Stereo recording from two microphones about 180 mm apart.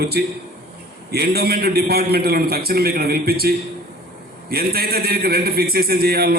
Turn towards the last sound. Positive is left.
turn(degrees=-60)  # may be behind; listen again after turning